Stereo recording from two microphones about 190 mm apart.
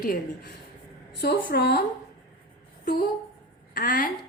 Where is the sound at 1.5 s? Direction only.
55° left (ahead or behind).